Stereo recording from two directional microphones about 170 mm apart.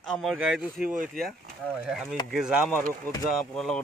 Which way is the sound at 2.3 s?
5° right (ahead or behind).